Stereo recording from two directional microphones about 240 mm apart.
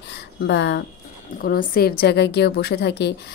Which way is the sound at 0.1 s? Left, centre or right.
Left.